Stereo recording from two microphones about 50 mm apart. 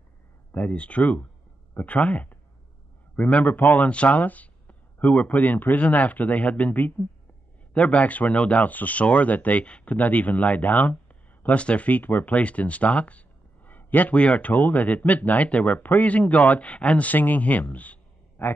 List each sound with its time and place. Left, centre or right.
0.5 s a man's voice: left
12.4 s a man's voice: left